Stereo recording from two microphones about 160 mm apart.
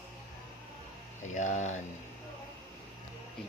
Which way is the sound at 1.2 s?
50° left (ahead or behind).